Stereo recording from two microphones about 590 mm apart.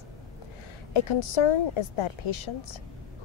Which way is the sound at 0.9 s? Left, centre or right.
Left.